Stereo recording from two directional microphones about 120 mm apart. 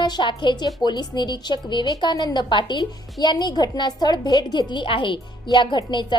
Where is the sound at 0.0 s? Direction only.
40° left (ahead or behind).